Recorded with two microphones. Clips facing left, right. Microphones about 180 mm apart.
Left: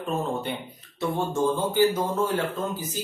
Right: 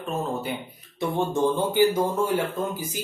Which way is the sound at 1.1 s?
15° right (ahead or behind).